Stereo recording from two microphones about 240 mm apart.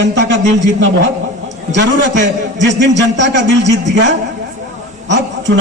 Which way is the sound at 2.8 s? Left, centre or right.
Right.